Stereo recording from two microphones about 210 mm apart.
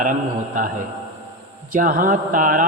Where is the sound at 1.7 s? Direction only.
40° right (ahead or behind).